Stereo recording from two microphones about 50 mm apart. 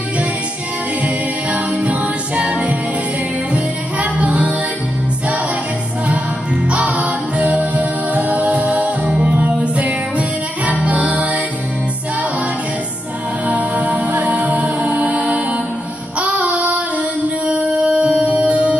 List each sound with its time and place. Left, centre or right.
1.0 s music: right
6.7 s music: right
13.5 s music: right
16.2 s child singing: right
17.5 s music: right